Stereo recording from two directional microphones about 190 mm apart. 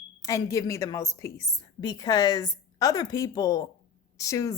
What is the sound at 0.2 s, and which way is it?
A woman's voice, 15° left (ahead or behind).